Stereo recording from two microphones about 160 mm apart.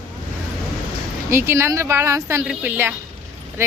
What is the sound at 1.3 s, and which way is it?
A woman's voice, 15° right (ahead or behind).